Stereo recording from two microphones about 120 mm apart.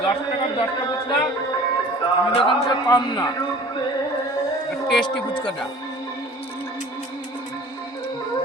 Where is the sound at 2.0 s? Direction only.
45° left (ahead or behind).